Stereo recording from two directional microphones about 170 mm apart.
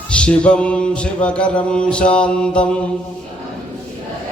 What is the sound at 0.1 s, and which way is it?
Mantra, 5° left (ahead or behind).